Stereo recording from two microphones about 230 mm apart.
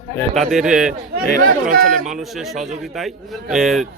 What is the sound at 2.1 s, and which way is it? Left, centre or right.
A man's voice, centre.